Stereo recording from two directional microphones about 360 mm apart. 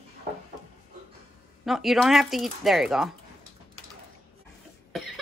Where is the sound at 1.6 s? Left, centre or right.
Centre.